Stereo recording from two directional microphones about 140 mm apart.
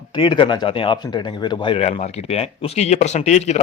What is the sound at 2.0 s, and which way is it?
Speech, 50° left (ahead or behind).